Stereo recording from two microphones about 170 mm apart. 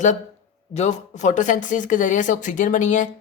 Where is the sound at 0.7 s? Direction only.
40° left (ahead or behind).